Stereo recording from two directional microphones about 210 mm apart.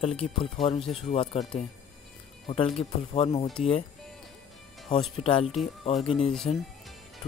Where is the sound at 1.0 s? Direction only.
30° left (ahead or behind).